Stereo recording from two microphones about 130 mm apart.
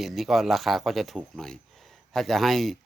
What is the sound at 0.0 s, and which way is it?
Speech, centre (ahead or behind).